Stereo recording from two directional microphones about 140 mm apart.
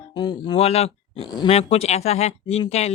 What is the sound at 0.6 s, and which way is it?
Speech, 45° left (ahead or behind).